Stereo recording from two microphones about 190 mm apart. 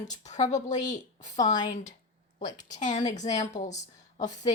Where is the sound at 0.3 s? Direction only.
40° left (ahead or behind).